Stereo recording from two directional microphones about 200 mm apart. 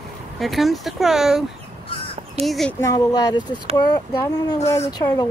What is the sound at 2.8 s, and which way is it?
Speech, 15° left (ahead or behind).